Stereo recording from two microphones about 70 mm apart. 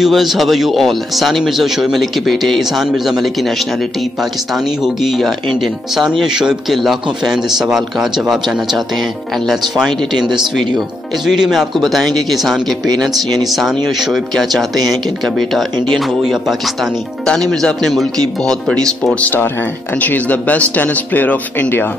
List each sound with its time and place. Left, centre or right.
0.0 s speech: centre
4.8 s speech: centre
13.4 s speech: centre
17.3 s a man's voice: centre
19.2 s speech: left